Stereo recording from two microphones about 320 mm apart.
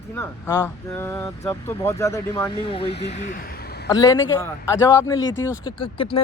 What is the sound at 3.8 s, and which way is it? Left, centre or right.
Speech, centre.